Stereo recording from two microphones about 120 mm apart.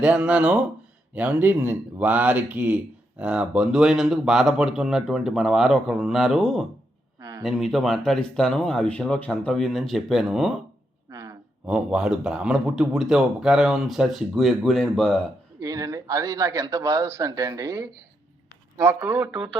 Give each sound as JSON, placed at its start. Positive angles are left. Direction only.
{"t": 0.0, "sound": "speech", "side_deg": -10}
{"t": 7.2, "sound": "a sound", "side_deg": -30}
{"t": 7.4, "sound": "speech", "side_deg": 0}
{"t": 11.1, "sound": "a sound", "side_deg": -25}
{"t": 11.6, "sound": "speech", "side_deg": -5}
{"t": 15.6, "sound": "a man's voice", "side_deg": -25}